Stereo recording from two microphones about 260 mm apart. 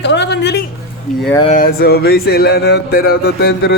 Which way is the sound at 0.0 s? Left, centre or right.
Left.